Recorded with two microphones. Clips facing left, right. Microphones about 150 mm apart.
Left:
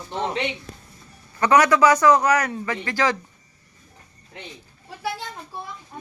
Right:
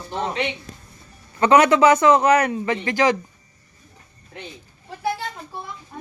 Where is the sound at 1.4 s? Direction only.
25° right (ahead or behind).